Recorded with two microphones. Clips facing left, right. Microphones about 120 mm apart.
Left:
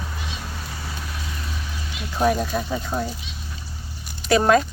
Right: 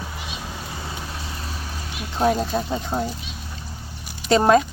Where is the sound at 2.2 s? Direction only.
25° right (ahead or behind).